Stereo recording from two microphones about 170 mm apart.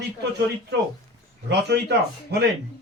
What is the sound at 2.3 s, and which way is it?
Chopping, 70° right (ahead or behind).